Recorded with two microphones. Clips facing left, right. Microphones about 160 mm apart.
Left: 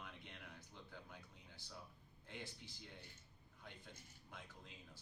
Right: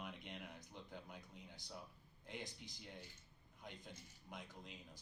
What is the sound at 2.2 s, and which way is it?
Speech, 15° right (ahead or behind).